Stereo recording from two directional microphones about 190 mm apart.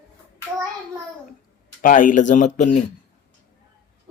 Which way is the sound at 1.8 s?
45° left (ahead or behind).